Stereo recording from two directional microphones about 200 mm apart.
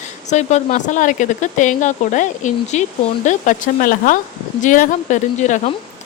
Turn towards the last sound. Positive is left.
turn(degrees=35)  # may be behind; listen again after turning